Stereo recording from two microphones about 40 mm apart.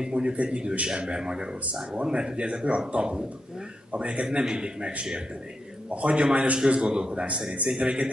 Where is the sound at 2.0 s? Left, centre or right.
Right.